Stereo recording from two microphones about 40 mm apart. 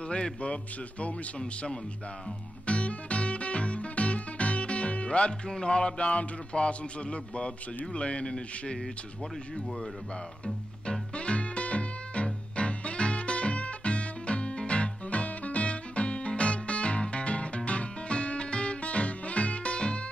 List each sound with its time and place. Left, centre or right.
0.1 s speech: left
2.6 s music: left
10.4 s music: left